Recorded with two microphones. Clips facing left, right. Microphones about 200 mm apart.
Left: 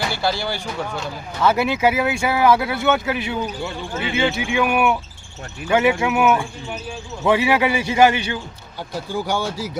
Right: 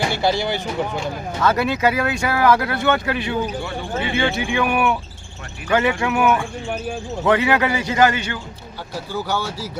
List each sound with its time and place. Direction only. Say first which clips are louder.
0.0 s speech: right 3 dB; 20° right (ahead or behind)
1.4 s speech: left 1 dB; 10° left (ahead or behind)
7.3 s speech: even; 10° left (ahead or behind)